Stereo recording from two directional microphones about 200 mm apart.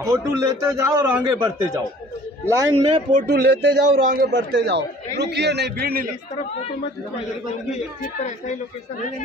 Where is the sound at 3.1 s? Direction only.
55° right (ahead or behind).